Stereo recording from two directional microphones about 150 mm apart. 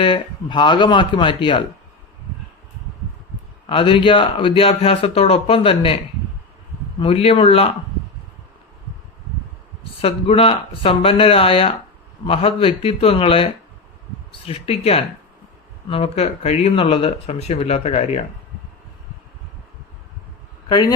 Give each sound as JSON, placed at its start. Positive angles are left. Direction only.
{"t": 0.0, "sound": "a man's voice", "side_deg": 35}
{"t": 3.7, "sound": "a man's voice", "side_deg": 35}
{"t": 7.0, "sound": "a man's voice", "side_deg": 40}
{"t": 10.0, "sound": "a man's voice", "side_deg": 40}